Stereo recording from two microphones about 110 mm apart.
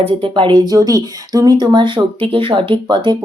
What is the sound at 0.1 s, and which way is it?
Speech, 50° right (ahead or behind).